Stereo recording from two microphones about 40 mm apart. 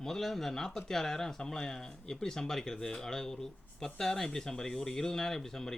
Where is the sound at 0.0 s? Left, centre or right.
Centre.